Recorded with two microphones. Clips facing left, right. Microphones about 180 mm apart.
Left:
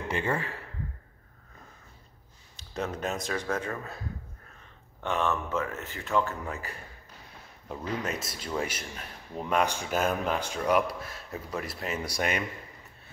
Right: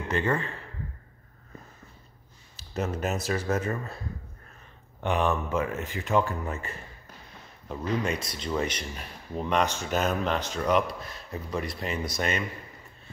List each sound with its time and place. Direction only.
0.1 s speech: 10° left (ahead or behind)
2.5 s speech: 5° right (ahead or behind)
5.0 s speech: 15° right (ahead or behind)
6.4 s speech: centre (ahead or behind)